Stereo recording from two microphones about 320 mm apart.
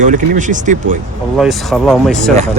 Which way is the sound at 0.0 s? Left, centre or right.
Right.